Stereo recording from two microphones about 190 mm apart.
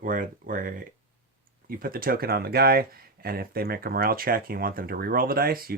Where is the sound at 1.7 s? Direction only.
50° right (ahead or behind).